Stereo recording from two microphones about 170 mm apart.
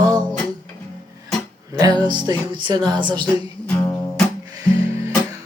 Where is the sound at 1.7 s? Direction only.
25° right (ahead or behind).